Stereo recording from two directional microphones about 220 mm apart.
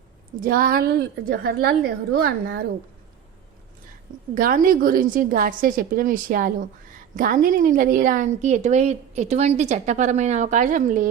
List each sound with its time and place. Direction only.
0.4 s a woman's voice: 40° right (ahead or behind)
4.4 s a woman's voice: 40° right (ahead or behind)